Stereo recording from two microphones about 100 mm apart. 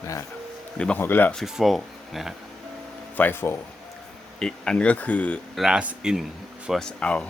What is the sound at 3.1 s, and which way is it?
Speech, 20° left (ahead or behind).